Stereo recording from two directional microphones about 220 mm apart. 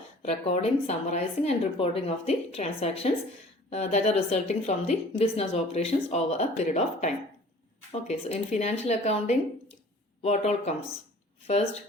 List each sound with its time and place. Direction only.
0.2 s a woman's voice: 30° left (ahead or behind)